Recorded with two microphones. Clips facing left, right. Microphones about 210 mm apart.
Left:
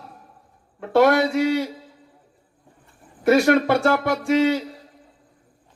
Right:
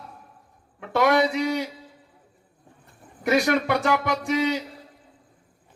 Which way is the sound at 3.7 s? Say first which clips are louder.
Left 4 dB; 50° left (ahead or behind).